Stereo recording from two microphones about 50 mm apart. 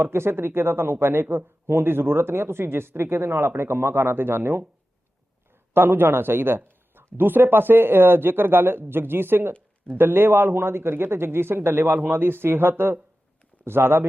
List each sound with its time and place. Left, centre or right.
0.0 s speech: right
5.7 s speech: right